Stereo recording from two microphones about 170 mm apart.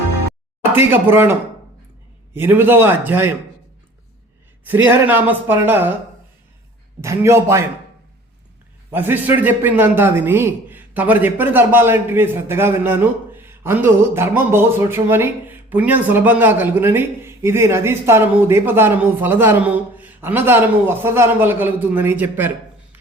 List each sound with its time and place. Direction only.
0.6 s a man's voice: 15° right (ahead or behind)
4.6 s a man's voice: 10° right (ahead or behind)
7.0 s a man's voice: 15° right (ahead or behind)
8.9 s a man's voice: 10° right (ahead or behind)